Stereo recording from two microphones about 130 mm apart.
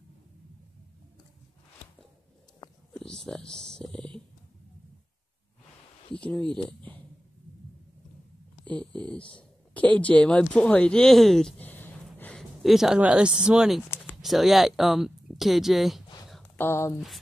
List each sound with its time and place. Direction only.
2.9 s stomach rumble: 5° left (ahead or behind)
6.1 s a sound: 10° left (ahead or behind)
8.6 s speech: 10° left (ahead or behind)
13.8 s a sound: 15° left (ahead or behind)
14.2 s speech: centre (ahead or behind)
16.5 s speech: 20° left (ahead or behind)